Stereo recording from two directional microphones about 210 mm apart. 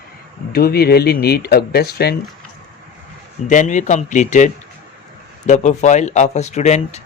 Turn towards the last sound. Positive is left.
turn(degrees=35)  # may be behind; listen again after turning